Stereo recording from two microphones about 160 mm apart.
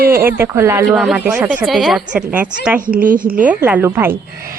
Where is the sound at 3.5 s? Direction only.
10° right (ahead or behind).